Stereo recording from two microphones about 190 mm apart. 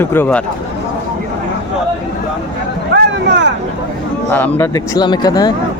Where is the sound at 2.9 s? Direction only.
65° right (ahead or behind).